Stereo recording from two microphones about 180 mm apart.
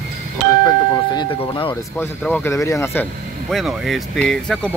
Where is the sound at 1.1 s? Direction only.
25° left (ahead or behind).